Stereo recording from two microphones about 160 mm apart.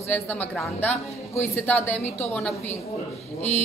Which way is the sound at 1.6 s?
10° left (ahead or behind).